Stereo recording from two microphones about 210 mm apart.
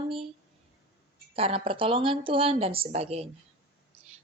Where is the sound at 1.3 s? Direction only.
25° right (ahead or behind).